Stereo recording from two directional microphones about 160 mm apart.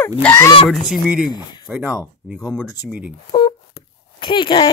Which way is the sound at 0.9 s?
5° right (ahead or behind).